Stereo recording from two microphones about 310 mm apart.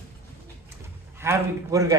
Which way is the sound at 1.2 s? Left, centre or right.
Centre.